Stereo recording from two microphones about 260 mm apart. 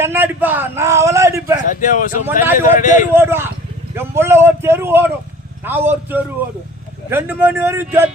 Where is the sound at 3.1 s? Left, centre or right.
Centre.